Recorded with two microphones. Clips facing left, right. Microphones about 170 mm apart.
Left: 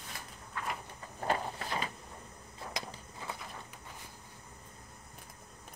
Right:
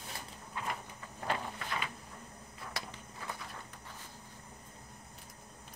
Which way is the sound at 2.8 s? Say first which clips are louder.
Left 2 dB; 15° left (ahead or behind).